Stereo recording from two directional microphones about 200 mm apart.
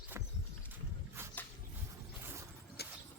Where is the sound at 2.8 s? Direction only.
55° left (ahead or behind).